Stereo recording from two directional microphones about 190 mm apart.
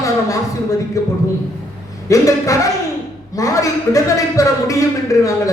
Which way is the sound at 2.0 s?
15° left (ahead or behind).